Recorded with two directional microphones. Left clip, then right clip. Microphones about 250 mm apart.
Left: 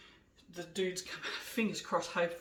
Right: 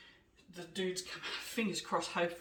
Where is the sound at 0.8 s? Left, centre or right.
Centre.